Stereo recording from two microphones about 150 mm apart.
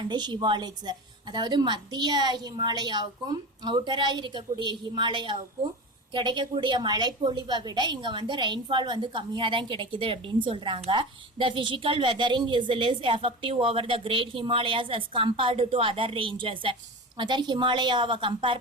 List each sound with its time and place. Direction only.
0.0 s a woman's voice: 30° right (ahead or behind)